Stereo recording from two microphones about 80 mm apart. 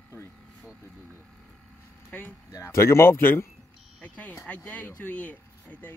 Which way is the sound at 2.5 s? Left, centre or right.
Left.